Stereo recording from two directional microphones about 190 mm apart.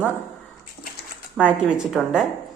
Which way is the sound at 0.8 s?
80° left.